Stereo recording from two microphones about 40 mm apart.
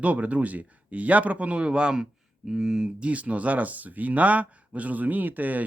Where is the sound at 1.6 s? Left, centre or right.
Right.